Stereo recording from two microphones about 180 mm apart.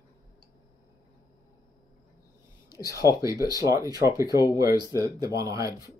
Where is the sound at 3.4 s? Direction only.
20° right (ahead or behind).